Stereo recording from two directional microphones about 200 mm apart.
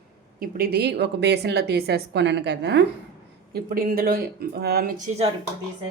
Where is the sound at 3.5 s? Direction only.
45° right (ahead or behind).